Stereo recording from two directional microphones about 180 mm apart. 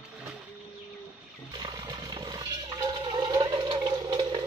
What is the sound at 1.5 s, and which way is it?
Toilet flush, 25° right (ahead or behind).